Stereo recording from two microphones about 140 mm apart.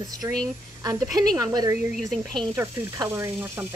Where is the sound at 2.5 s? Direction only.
20° right (ahead or behind).